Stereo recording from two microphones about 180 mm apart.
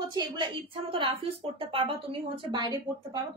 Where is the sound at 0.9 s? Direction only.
30° right (ahead or behind).